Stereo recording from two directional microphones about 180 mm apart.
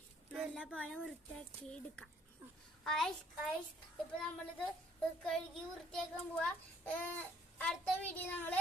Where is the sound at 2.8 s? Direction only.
Centre (ahead or behind).